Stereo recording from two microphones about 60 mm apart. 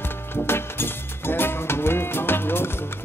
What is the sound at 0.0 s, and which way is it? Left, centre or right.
Music, left.